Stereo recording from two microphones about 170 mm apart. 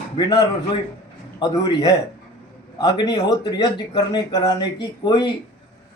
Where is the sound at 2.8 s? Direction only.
25° left (ahead or behind).